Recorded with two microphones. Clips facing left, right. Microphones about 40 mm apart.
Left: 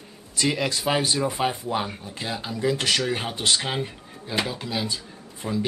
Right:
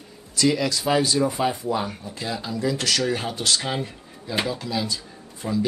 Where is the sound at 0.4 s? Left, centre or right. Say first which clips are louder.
Right 3 dB; left.